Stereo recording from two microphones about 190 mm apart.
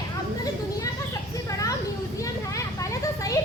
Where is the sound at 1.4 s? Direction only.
20° left (ahead or behind).